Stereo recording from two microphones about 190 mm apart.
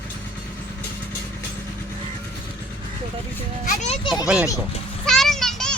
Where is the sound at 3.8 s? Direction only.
35° left (ahead or behind).